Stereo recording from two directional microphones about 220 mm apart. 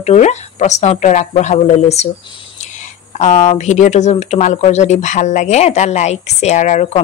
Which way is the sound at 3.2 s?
30° left (ahead or behind).